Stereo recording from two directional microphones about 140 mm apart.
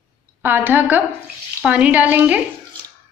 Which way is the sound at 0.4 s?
15° right (ahead or behind).